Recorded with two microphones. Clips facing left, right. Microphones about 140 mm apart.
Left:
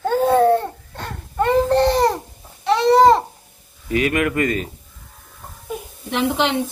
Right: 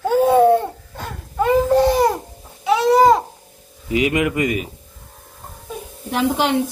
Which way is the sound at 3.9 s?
20° right (ahead or behind).